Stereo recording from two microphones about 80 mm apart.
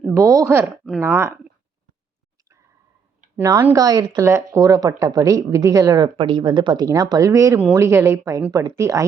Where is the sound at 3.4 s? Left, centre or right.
Right.